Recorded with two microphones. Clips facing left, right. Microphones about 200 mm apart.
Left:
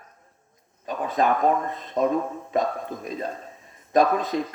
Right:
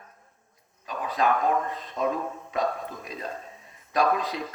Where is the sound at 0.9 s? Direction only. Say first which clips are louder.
Left 3 dB; 45° left (ahead or behind).